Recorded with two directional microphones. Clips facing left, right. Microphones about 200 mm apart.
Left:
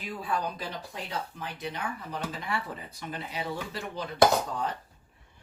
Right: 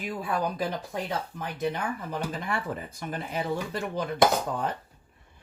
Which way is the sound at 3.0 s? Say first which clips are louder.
Right 2 dB; 50° right (ahead or behind).